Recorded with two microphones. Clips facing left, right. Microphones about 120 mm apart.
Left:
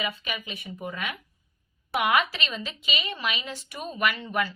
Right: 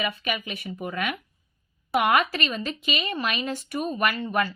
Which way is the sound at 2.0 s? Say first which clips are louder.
Right 3 dB; 45° right (ahead or behind).